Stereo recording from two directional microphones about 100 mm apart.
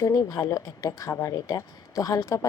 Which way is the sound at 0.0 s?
35° left (ahead or behind).